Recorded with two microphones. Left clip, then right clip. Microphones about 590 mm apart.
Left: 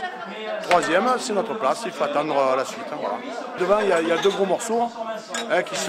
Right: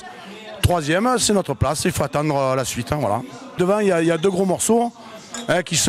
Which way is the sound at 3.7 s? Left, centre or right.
Right.